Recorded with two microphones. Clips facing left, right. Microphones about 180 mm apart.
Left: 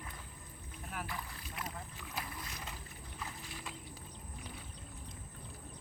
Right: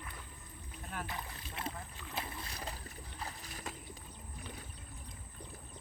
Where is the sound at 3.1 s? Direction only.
40° right (ahead or behind).